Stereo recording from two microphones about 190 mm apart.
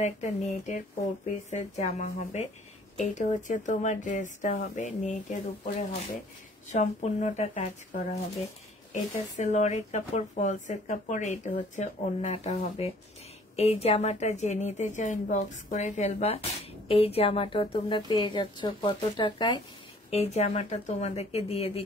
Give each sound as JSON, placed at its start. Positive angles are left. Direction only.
{"t": 0.0, "sound": "speech", "side_deg": 35}
{"t": 9.4, "sound": "a woman's voice", "side_deg": 40}